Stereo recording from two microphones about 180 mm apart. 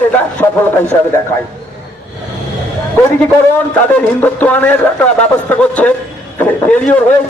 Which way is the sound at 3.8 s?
10° left (ahead or behind).